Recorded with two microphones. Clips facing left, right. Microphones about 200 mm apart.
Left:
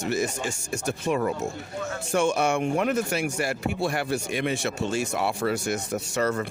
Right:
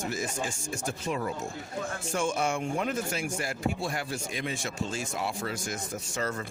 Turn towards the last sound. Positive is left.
turn(degrees=70)  # may be behind; listen again after turning